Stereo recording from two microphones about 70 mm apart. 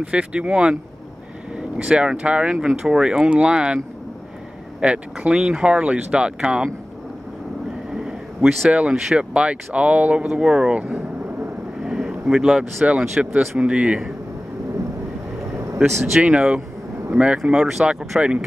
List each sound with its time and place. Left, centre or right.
0.0 s speech: centre
1.9 s speech: centre
4.8 s speech: centre
7.9 s speech: centre
10.7 s speech: right
11.8 s speech: centre
16.2 s speech: centre
17.4 s speech: centre